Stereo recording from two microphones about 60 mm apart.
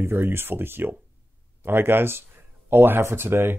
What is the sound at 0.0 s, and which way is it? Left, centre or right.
Speech, right.